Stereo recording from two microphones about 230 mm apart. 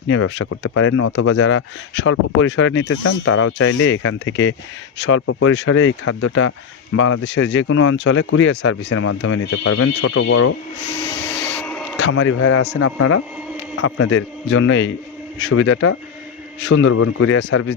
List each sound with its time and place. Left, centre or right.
0.1 s speech: left
0.7 s speech: left
10.8 s vacuum cleaner: left
11.6 s a sound: centre
12.1 s a man's voice: left
14.1 s speech: left
17.3 s speech: left